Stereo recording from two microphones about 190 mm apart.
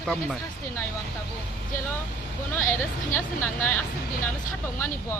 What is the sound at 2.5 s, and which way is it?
A man's voice, 15° left (ahead or behind).